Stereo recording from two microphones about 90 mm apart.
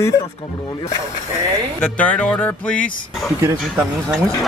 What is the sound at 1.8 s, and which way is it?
Speech, 15° left (ahead or behind).